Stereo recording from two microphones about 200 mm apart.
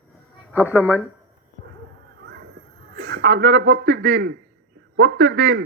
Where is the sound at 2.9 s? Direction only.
55° right (ahead or behind).